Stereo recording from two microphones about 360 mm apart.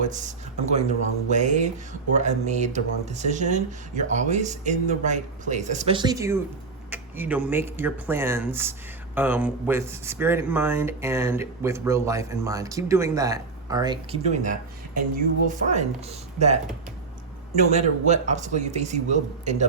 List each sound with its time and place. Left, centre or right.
0.0 s speech: centre
17.7 s speech: centre